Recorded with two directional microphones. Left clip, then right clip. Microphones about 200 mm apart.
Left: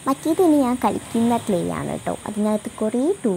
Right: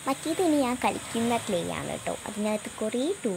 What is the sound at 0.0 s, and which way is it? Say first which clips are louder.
Speech: left 8 dB; 15° left (ahead or behind).